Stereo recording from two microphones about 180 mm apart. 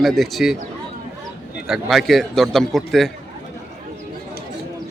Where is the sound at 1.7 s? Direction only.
Centre (ahead or behind).